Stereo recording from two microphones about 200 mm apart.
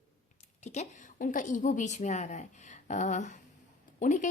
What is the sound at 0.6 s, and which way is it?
A woman's voice, 35° left (ahead or behind).